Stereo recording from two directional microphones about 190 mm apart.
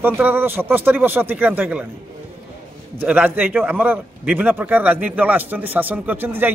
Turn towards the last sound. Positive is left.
turn(degrees=-10)  # may be behind; listen again after turning